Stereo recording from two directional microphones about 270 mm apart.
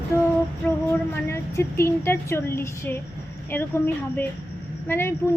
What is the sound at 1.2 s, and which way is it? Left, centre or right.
A woman's voice, centre.